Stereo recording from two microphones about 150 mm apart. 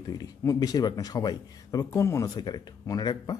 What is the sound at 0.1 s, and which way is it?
Speech, 25° left (ahead or behind).